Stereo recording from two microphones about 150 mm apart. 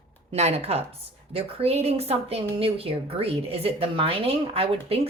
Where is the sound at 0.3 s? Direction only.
45° right (ahead or behind).